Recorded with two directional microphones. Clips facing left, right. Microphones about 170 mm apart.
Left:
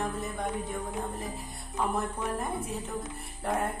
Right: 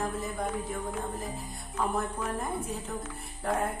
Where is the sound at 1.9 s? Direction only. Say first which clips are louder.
Even; centre (ahead or behind).